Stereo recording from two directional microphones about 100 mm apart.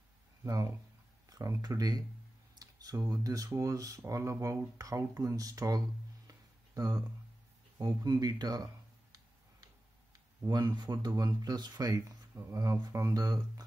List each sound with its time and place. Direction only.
0.4 s speech: 35° right (ahead or behind)
6.2 s a sound: 40° right (ahead or behind)
7.8 s speech: 40° right (ahead or behind)
10.5 s speech: 40° right (ahead or behind)
12.4 s speech: 30° right (ahead or behind)